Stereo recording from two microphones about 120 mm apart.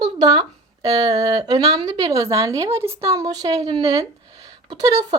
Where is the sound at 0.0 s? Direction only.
35° right (ahead or behind).